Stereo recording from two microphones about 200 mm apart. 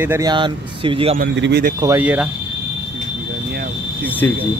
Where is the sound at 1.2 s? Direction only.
60° right (ahead or behind).